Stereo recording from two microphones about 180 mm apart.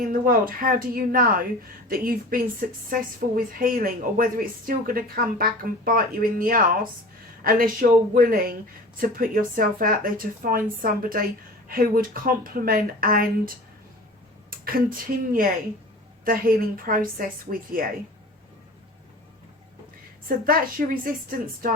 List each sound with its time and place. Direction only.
0.0 s a woman's voice: 50° right (ahead or behind)
14.5 s a woman's voice: 55° right (ahead or behind)
20.2 s a woman's voice: 50° right (ahead or behind)